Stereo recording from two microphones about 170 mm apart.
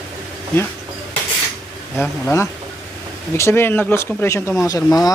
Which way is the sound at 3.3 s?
15° left (ahead or behind).